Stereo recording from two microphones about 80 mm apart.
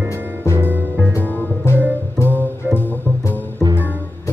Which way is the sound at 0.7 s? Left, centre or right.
Right.